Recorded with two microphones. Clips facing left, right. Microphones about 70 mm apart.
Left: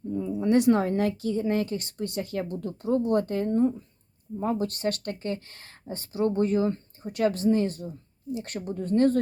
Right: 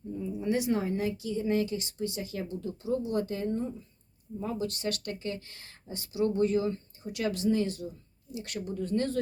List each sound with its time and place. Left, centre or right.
0.1 s a woman's voice: left